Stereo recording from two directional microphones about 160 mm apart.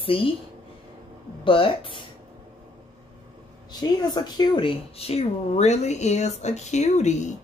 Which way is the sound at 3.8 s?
25° left (ahead or behind).